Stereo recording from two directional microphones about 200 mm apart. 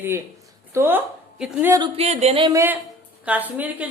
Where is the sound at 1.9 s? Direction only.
30° right (ahead or behind).